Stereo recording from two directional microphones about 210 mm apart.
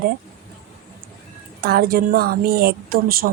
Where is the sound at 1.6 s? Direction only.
45° right (ahead or behind).